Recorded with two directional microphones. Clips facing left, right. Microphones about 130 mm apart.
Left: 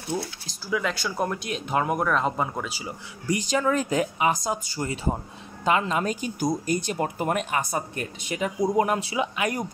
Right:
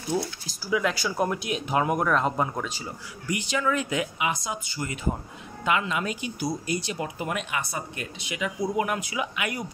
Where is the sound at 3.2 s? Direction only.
35° left (ahead or behind).